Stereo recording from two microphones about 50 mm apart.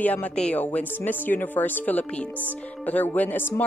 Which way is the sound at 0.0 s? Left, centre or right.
Left.